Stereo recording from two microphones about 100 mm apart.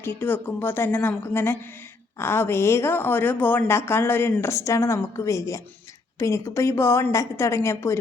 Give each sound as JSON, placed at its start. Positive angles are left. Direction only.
{"t": 0.0, "sound": "speech", "side_deg": 20}